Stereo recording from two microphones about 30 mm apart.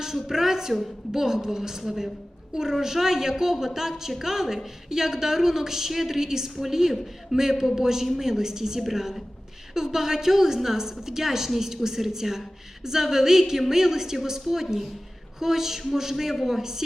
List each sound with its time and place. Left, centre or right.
0.0 s a woman's voice: centre